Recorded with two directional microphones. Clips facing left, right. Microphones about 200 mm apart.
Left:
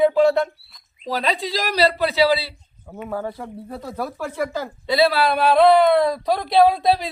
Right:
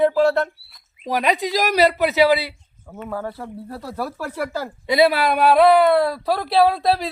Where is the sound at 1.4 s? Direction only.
15° right (ahead or behind).